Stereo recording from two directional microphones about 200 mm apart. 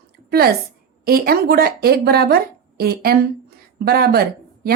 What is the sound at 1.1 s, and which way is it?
A woman's voice, 50° right (ahead or behind).